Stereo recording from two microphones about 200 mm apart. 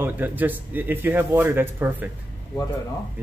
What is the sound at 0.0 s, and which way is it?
Speech, 10° right (ahead or behind).